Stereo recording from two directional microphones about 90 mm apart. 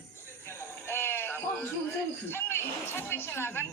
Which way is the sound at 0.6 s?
25° left (ahead or behind).